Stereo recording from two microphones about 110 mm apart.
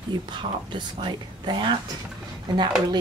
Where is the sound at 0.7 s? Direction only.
45° right (ahead or behind).